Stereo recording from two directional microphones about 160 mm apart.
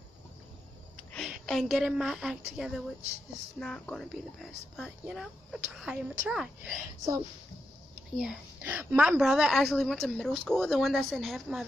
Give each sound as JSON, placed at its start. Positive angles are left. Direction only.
{"t": 1.1, "sound": "a woman's voice", "side_deg": 5}
{"t": 8.2, "sound": "speech", "side_deg": -5}